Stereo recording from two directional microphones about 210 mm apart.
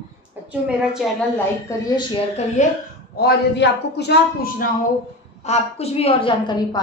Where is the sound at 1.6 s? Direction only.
15° left (ahead or behind).